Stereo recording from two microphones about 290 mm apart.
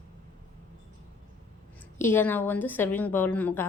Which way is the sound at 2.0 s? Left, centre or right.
Centre.